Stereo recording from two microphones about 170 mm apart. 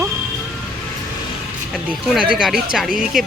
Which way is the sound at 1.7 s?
5° right (ahead or behind).